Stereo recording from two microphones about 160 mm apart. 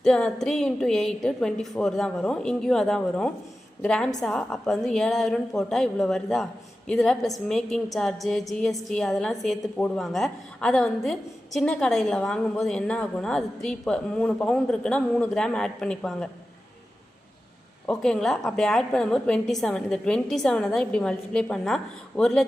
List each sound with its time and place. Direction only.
0.0 s a woman's voice: 5° left (ahead or behind)
17.8 s a woman's voice: 5° left (ahead or behind)